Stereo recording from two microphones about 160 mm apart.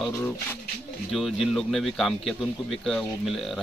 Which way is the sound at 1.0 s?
Centre (ahead or behind).